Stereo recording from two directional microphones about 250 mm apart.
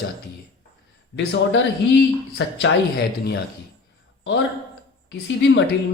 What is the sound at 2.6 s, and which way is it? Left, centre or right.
Speech, left.